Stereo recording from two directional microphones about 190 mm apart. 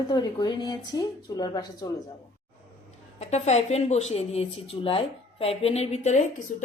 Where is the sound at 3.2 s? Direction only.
35° left (ahead or behind).